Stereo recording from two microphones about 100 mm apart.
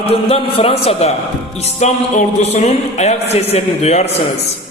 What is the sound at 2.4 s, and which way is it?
A man's voice, 90° left.